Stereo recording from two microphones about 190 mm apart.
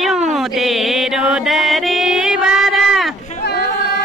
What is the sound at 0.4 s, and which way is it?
Mantra, centre (ahead or behind).